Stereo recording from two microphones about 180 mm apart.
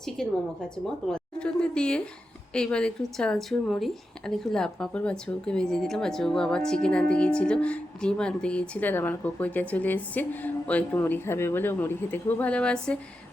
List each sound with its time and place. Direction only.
0.2 s a woman's voice: 5° left (ahead or behind)